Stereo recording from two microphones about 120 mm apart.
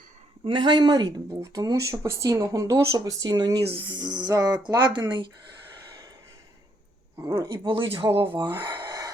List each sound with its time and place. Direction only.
0.4 s speech: 40° right (ahead or behind)
3.6 s speech: 50° right (ahead or behind)
7.2 s speech: 40° right (ahead or behind)
8.5 s a sound: 40° right (ahead or behind)